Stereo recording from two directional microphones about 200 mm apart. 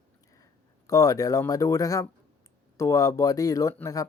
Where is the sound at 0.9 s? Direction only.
15° left (ahead or behind).